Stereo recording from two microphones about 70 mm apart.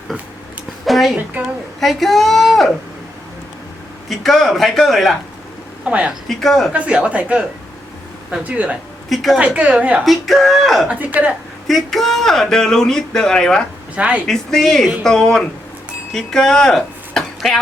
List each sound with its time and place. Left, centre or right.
0.9 s a sound: centre
1.8 s a man's voice: centre
4.1 s a man's voice: centre
5.8 s speech: centre
6.2 s a man's voice: centre
6.7 s speech: centre
8.4 s speech: right
9.0 s a man's voice: centre
9.4 s a woman's voice: centre
10.1 s a man's voice: centre
10.8 s speech: right
11.7 s speech: centre
13.9 s a woman's voice: centre
14.3 s a man's voice: centre